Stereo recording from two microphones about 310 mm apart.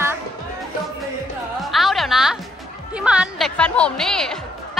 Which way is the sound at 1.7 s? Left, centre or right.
Centre.